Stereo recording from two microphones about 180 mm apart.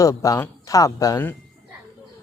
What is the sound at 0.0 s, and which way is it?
Speech, 20° left (ahead or behind).